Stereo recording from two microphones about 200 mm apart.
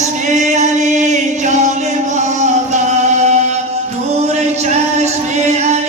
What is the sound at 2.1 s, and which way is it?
Music, 35° right (ahead or behind).